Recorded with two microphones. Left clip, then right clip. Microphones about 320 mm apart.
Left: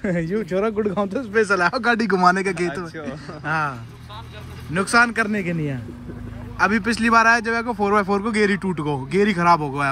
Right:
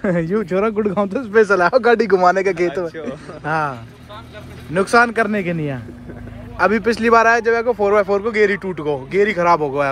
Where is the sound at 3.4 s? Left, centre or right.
Centre.